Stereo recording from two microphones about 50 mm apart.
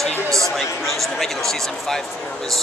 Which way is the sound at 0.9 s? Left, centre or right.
Centre.